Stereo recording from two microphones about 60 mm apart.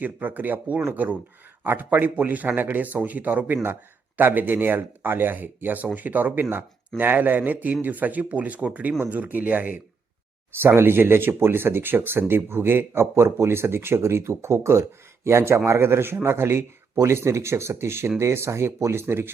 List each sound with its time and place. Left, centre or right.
0.0 s a man's voice: right
10.6 s speech: right